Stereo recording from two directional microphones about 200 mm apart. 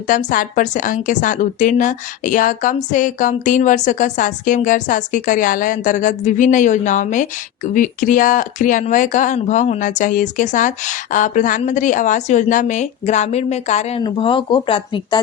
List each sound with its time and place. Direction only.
0.1 s a woman's voice: 40° left (ahead or behind); by 15.2 s 25° left (ahead or behind)